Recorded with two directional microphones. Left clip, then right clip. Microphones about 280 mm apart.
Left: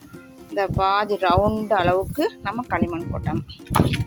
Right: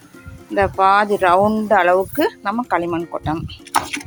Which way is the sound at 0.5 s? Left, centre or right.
Left.